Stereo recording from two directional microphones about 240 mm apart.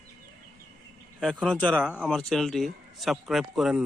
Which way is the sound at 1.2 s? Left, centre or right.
Centre.